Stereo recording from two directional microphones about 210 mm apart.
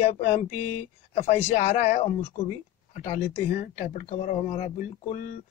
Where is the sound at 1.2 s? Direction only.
30° left (ahead or behind).